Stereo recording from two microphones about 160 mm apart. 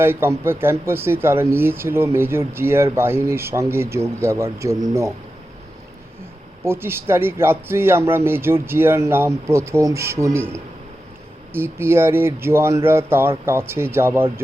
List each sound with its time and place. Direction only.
0.0 s speech: 15° right (ahead or behind)
6.7 s speech: 15° right (ahead or behind)